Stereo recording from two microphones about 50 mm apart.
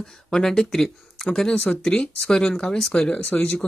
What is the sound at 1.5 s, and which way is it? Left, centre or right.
Speech, left.